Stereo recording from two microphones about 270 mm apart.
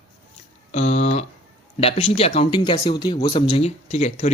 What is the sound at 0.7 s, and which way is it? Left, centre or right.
Speech, left.